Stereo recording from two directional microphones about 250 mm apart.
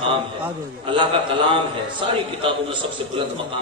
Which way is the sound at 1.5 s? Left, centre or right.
Right.